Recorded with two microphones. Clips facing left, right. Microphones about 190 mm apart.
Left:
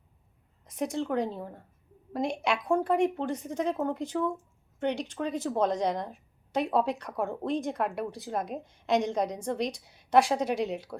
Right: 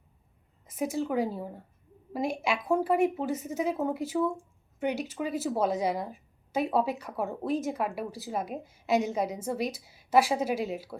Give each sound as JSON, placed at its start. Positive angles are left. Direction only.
{"t": 0.6, "sound": "a woman's voice", "side_deg": -5}